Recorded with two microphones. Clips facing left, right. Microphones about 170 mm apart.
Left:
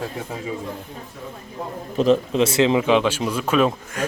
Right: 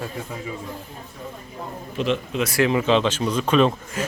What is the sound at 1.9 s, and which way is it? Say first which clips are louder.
Speech: left 6 dB; 40° left (ahead or behind).